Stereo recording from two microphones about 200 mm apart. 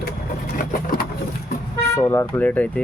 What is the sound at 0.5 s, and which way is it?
Vehicle, 45° left (ahead or behind).